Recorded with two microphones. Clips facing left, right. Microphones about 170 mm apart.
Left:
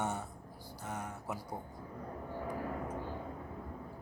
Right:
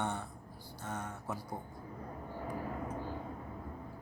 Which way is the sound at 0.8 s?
15° left (ahead or behind).